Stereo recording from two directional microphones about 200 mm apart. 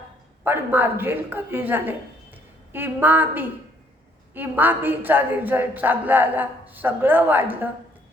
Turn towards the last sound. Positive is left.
turn(degrees=-10)  # may be behind; listen again after turning